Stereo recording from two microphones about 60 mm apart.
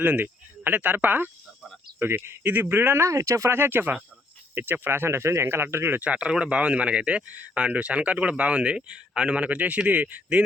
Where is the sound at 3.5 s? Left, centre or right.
Right.